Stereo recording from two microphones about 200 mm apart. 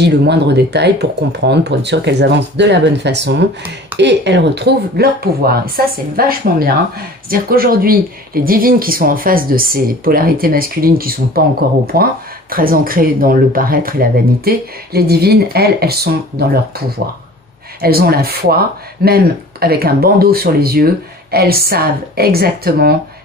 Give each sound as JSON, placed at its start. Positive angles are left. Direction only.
{"t": 0.0, "sound": "speech", "side_deg": -55}
{"t": 17.8, "sound": "speech", "side_deg": -50}